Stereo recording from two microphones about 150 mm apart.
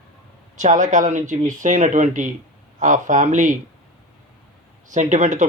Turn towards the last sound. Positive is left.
turn(degrees=-55)  # may be behind; listen again after turning